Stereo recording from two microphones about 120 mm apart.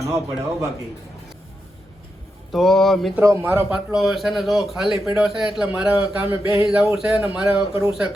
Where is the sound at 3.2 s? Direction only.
25° right (ahead or behind).